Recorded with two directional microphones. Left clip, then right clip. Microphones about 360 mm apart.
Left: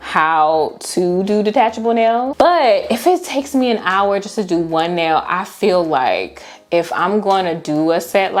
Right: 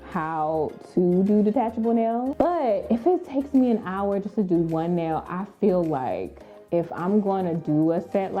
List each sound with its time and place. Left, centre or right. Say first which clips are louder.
0.1 s a woman's voice: left 14 dB; centre
0.4 s speech: left 11 dB; centre
1.3 s a woman's voice: left 9 dB; centre